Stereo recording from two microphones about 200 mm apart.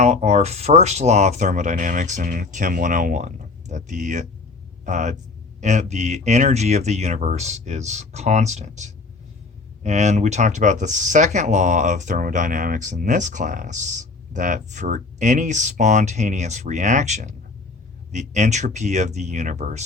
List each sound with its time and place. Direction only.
0.0 s speech: 35° right (ahead or behind)